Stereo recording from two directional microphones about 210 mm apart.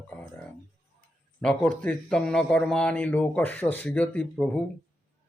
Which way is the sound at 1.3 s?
5° left (ahead or behind).